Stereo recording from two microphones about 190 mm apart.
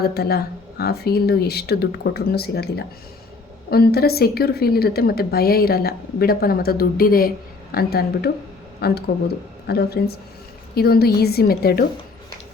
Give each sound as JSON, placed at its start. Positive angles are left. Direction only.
{"t": 0.0, "sound": "a woman's voice", "side_deg": 55}